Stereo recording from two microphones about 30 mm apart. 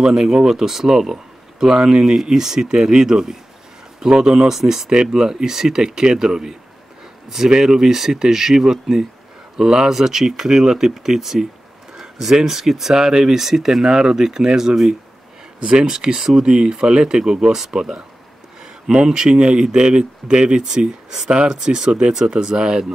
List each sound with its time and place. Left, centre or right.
0.0 s speech: centre
4.5 s speech: centre
12.0 s a sound: centre
12.4 s speech: centre
12.9 s speech: right
19.0 s speech: centre
19.3 s speech: right